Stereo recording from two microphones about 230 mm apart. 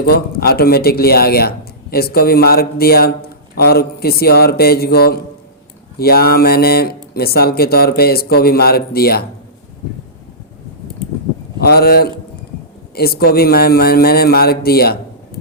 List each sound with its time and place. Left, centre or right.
0.0 s a man's voice: left
11.6 s a man's voice: left